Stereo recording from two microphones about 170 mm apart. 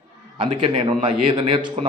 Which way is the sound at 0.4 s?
30° right (ahead or behind).